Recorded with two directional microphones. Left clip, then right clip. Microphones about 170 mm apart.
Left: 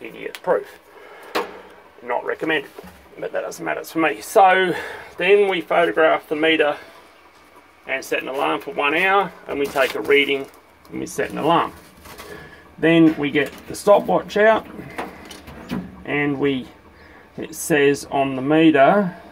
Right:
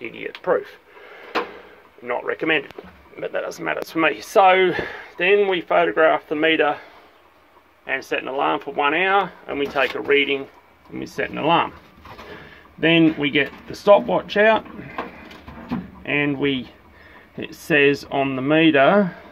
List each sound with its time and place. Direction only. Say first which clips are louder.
2.0 s speech: even; 30° right (ahead or behind)
3.2 s speech: even; 20° right (ahead or behind)
7.8 s speech: left 1 dB; 20° right (ahead or behind)
13.0 s speech: left 1 dB; 25° right (ahead or behind)
16.1 s speech: even; 20° right (ahead or behind)